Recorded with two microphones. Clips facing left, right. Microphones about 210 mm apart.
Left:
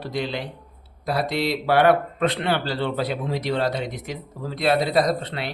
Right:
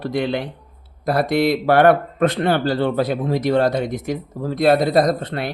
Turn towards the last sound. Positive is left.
turn(degrees=-45)  # may be behind; listen again after turning